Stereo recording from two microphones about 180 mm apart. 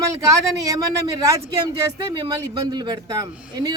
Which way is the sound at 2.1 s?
25° right (ahead or behind).